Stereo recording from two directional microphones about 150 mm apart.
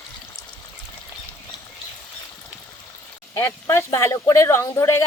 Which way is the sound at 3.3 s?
15° left (ahead or behind).